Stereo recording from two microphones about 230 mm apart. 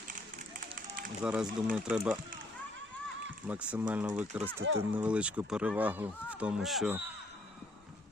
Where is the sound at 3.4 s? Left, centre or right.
Centre.